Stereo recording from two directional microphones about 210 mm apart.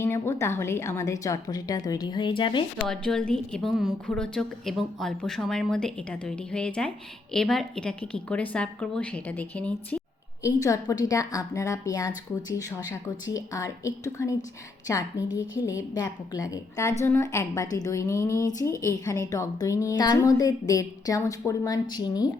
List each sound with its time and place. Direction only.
0.0 s a woman's voice: 10° left (ahead or behind)
2.8 s a woman's voice: centre (ahead or behind); by 22.3 s 20° left (ahead or behind)